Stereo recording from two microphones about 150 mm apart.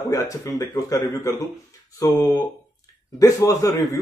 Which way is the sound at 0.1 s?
20° left (ahead or behind).